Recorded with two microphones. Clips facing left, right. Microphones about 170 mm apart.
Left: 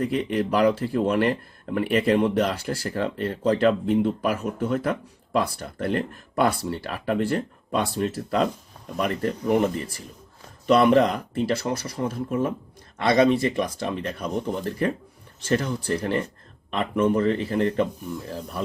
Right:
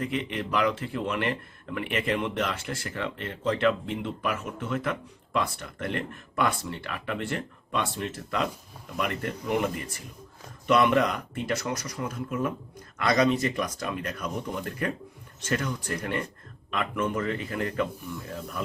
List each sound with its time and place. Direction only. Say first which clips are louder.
0.0 s speech: left 6 dB; 40° left (ahead or behind)